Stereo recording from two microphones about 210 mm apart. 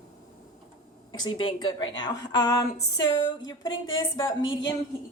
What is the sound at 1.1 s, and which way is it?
A woman's voice, 20° left (ahead or behind).